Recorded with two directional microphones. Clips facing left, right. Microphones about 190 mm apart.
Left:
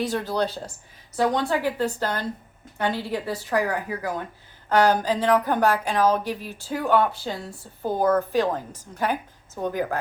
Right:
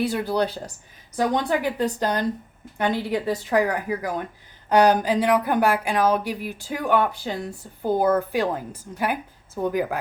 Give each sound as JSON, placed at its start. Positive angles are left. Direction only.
{"t": 0.0, "sound": "speech", "side_deg": -10}